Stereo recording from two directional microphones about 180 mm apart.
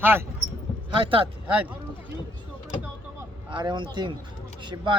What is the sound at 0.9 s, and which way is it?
Speech, 30° right (ahead or behind).